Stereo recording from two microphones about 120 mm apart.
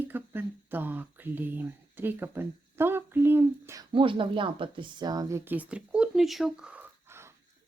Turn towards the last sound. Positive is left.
turn(degrees=-20)  # may be behind; listen again after turning